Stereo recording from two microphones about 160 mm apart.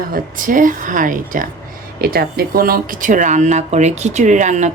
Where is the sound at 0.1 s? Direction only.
55° right (ahead or behind).